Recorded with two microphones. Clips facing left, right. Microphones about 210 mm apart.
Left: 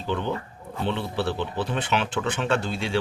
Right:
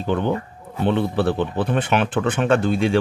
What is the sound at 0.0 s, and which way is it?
Speech, 50° right (ahead or behind).